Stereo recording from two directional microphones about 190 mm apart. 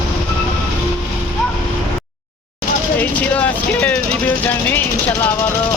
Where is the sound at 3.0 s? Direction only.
10° left (ahead or behind).